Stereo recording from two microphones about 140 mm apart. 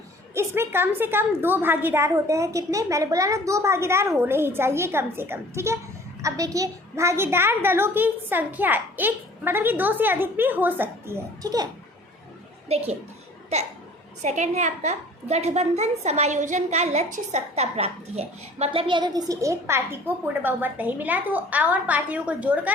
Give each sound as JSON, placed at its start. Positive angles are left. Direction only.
{"t": 0.3, "sound": "a woman's voice", "side_deg": -15}
{"t": 12.6, "sound": "a child's voice", "side_deg": -45}